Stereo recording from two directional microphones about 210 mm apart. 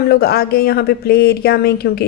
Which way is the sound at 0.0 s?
45° left (ahead or behind).